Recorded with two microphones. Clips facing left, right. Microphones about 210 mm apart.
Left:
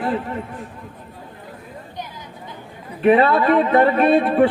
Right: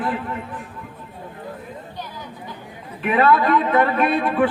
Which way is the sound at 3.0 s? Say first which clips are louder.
Left 3 dB; 35° left (ahead or behind).